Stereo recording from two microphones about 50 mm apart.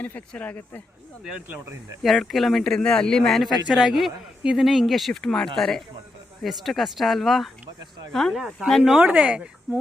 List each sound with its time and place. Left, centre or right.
0.0 s speech: left
2.0 s a man's voice: centre
3.7 s speech: centre
4.4 s speech: centre
5.2 s a man's voice: centre
6.4 s speech: centre
8.4 s speech: centre
9.0 s speech: right